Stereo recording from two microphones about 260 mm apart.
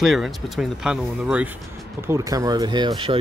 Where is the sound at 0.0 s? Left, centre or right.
Centre.